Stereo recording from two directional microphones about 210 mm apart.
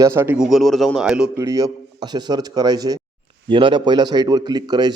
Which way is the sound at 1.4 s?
15° right (ahead or behind).